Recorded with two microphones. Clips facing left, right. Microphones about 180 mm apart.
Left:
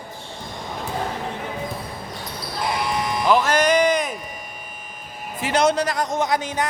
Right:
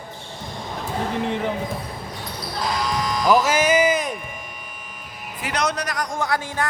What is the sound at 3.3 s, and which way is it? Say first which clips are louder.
Speech: even; 5° right (ahead or behind).